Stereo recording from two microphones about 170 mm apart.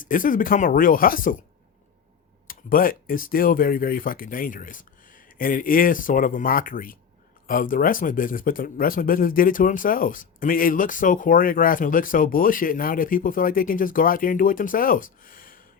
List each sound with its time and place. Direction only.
0.0 s speech: 50° left (ahead or behind)
2.5 s speech: 55° left (ahead or behind)